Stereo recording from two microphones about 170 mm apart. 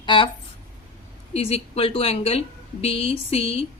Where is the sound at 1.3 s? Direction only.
35° left (ahead or behind).